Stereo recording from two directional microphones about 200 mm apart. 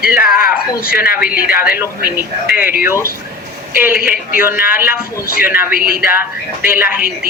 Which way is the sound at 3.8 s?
10° right (ahead or behind).